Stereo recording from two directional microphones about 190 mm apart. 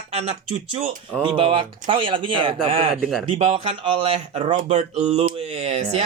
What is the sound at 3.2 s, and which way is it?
Speech, 30° right (ahead or behind).